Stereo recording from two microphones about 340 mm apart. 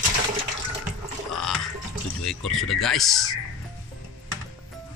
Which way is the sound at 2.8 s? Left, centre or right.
Centre.